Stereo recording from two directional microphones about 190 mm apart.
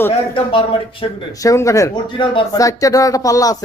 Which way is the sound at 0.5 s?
20° left (ahead or behind).